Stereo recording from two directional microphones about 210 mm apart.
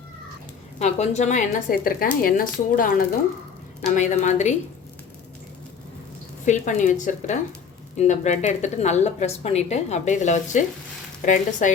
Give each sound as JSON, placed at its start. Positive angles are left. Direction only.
{"t": 0.8, "sound": "a woman's voice", "side_deg": 35}
{"t": 6.4, "sound": "a woman's voice", "side_deg": 35}
{"t": 11.6, "sound": "a woman's voice", "side_deg": 35}